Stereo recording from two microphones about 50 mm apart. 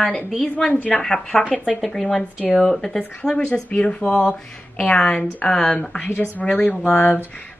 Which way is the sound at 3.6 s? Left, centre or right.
Left.